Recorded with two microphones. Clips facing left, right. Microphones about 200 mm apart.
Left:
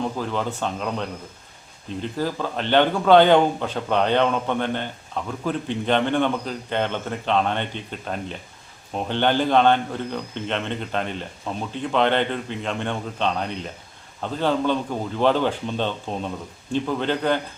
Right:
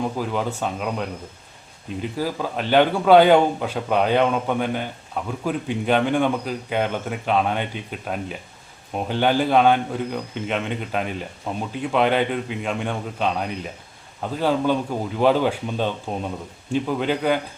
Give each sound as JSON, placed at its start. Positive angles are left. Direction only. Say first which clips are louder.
{"t": 0.0, "sound": "speech", "louder": "right 1 dB", "side_deg": -10}